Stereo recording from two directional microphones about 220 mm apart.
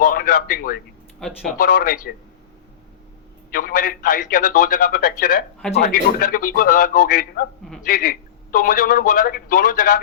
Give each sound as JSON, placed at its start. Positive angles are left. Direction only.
{"t": 0.0, "sound": "a man's voice", "side_deg": 40}
{"t": 1.2, "sound": "speech", "side_deg": 0}
{"t": 1.5, "sound": "a man's voice", "side_deg": 40}
{"t": 3.5, "sound": "a man's voice", "side_deg": 40}